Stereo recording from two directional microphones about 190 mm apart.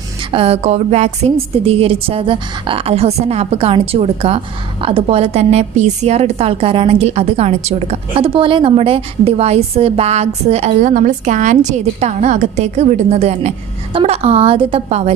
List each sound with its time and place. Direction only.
0.3 s a woman's voice: 30° right (ahead or behind)